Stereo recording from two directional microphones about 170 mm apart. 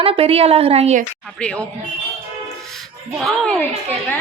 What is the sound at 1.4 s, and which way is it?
Speech, 5° left (ahead or behind).